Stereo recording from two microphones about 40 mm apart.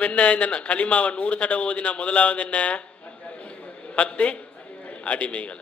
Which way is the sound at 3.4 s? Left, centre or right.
Left.